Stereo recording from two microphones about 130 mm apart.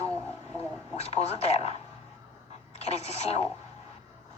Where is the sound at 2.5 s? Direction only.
55° left (ahead or behind).